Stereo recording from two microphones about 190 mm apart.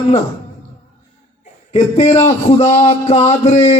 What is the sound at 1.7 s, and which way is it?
A man's voice, 35° left (ahead or behind).